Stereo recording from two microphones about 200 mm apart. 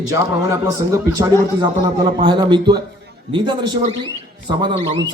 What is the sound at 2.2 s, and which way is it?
A man's voice, 25° right (ahead or behind).